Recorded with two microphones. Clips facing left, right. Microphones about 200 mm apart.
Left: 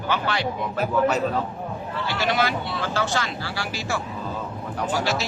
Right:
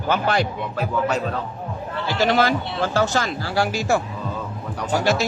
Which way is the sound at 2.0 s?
40° right (ahead or behind).